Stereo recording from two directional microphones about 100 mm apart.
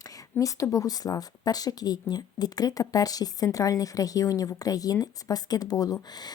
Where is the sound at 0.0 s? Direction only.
35° left (ahead or behind).